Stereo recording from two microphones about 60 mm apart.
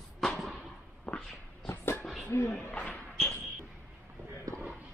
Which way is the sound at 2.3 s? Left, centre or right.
Left.